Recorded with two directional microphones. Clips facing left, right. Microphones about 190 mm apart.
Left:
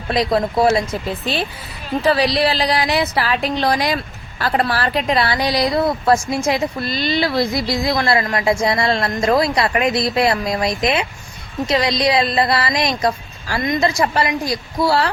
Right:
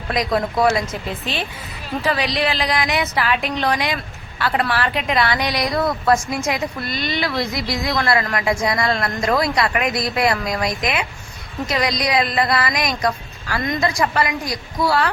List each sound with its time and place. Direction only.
0.1 s a woman's voice: 30° left (ahead or behind)